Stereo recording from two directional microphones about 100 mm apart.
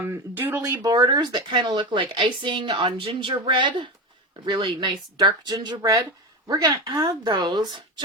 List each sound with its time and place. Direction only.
0.0 s speech: 20° right (ahead or behind)
0.6 s speech: 35° right (ahead or behind)